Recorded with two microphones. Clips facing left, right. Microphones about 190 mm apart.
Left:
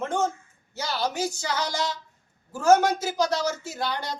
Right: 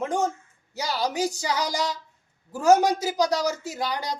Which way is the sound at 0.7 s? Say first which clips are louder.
Right 2 dB; 15° right (ahead or behind).